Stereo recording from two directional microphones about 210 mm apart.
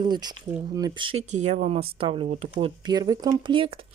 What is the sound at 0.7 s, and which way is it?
Speech, 20° right (ahead or behind).